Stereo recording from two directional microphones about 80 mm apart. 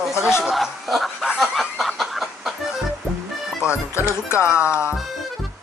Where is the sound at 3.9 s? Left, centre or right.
Left.